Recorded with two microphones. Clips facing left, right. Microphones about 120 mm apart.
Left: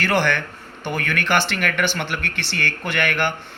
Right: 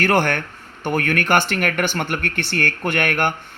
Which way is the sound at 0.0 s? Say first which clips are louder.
Right 2 dB; 45° right (ahead or behind).